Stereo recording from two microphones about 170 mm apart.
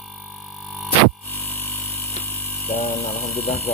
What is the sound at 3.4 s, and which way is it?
Speech, 35° left (ahead or behind).